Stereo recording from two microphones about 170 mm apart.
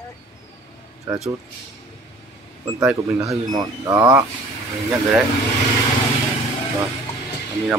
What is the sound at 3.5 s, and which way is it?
Speech, 20° right (ahead or behind).